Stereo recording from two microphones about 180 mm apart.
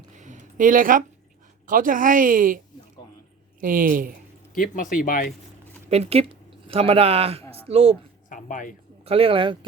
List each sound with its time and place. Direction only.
0.2 s a sound: 45° right (ahead or behind)
1.6 s speech: 50° right (ahead or behind)
3.6 s speech: 50° right (ahead or behind)
4.5 s speech: 45° left (ahead or behind)
5.9 s a woman's voice: 35° right (ahead or behind)
8.3 s speech: 45° left (ahead or behind)
9.0 s speech: 30° right (ahead or behind)